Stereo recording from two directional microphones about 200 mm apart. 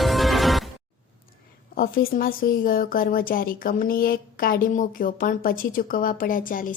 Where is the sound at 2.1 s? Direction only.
45° left (ahead or behind).